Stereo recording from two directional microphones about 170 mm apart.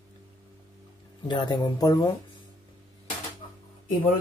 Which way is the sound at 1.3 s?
25° left (ahead or behind).